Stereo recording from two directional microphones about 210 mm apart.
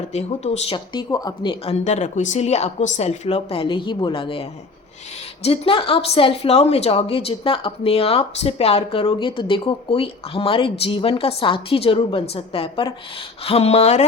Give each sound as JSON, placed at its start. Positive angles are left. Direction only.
{"t": 0.1, "sound": "speech", "side_deg": 30}
{"t": 0.9, "sound": "a woman's voice", "side_deg": 20}